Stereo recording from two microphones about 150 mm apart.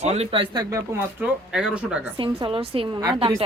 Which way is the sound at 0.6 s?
20° right (ahead or behind).